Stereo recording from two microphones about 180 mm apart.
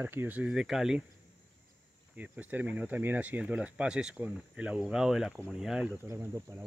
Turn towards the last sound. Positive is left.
turn(degrees=-15)  # may be behind; listen again after turning